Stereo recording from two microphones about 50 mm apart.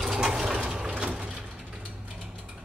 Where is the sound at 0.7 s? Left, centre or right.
Centre.